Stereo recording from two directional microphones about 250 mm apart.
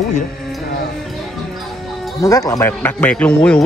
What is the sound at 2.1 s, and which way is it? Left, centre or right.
Speech, centre.